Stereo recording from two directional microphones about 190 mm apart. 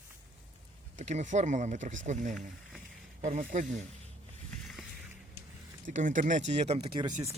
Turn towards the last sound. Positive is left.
turn(degrees=-25)  # may be behind; listen again after turning